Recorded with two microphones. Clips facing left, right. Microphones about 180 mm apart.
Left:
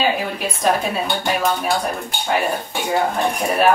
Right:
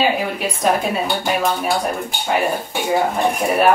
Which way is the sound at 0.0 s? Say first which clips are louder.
Right 2 dB; 5° right (ahead or behind).